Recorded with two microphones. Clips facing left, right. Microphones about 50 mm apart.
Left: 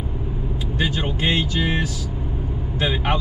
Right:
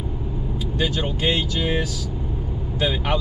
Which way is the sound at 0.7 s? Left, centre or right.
Centre.